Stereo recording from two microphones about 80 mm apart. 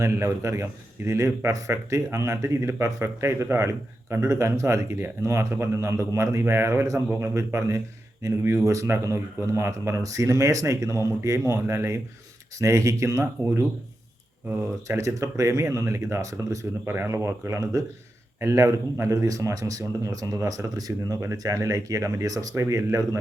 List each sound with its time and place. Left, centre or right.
0.0 s a man's voice: right
14.8 s a man's voice: right
16.8 s a man's voice: right